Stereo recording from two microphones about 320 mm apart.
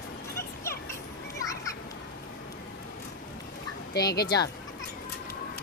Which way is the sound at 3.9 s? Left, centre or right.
Left.